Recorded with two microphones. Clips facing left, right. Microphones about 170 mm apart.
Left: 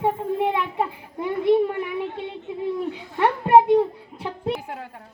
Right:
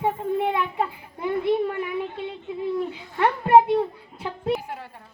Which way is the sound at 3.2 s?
15° left (ahead or behind).